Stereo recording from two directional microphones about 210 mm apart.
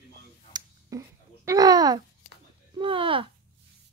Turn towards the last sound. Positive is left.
turn(degrees=-25)  # may be behind; listen again after turning